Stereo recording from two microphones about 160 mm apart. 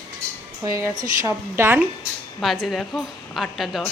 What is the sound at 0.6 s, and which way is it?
A woman's voice, 25° right (ahead or behind).